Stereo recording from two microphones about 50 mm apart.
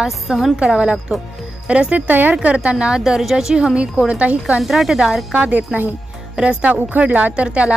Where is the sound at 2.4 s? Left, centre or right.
Right.